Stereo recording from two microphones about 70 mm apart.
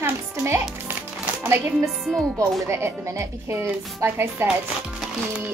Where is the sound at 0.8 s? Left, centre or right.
Right.